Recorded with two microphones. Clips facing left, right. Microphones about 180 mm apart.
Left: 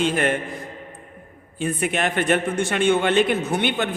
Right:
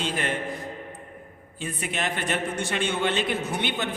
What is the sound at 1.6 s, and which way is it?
A man's voice, 55° left (ahead or behind).